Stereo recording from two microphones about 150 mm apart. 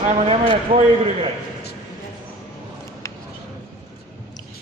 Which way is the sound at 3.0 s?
20° left (ahead or behind).